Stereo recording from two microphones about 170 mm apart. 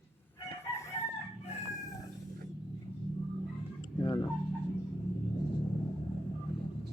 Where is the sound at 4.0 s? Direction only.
25° left (ahead or behind).